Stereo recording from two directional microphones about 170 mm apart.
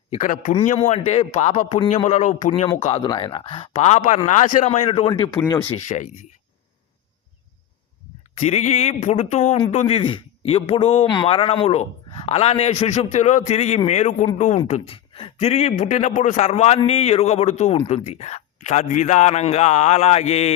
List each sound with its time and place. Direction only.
0.1 s a man's voice: 45° left (ahead or behind)
3.0 s a man's voice: 30° left (ahead or behind); by 6.2 s 45° left (ahead or behind)
8.4 s a man's voice: 40° left (ahead or behind)
14.7 s a man's voice: 35° left (ahead or behind)